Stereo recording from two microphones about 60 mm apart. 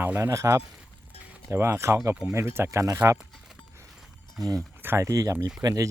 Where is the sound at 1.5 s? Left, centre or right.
Right.